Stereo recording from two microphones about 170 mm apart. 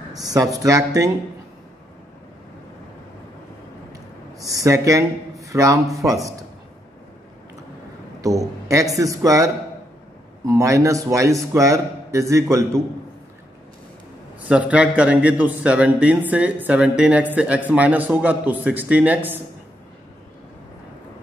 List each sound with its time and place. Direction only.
0.1 s a man's voice: 20° right (ahead or behind)
4.5 s speech: 20° right (ahead or behind)
8.2 s a man's voice: 20° right (ahead or behind)
14.5 s speech: 5° right (ahead or behind)